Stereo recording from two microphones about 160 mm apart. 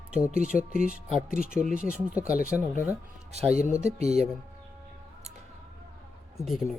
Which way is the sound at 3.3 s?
40° right (ahead or behind).